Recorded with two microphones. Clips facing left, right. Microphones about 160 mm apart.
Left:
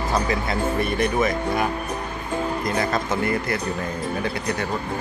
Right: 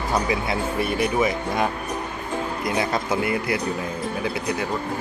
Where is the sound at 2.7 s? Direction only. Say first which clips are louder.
Right 2 dB; 10° right (ahead or behind).